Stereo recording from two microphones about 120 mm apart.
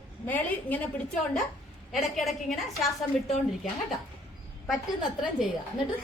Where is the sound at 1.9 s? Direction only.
Centre (ahead or behind).